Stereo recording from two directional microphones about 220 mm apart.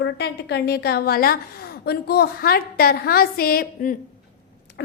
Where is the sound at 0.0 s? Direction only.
50° left (ahead or behind).